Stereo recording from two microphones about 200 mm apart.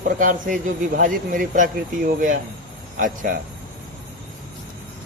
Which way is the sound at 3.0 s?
40° right (ahead or behind).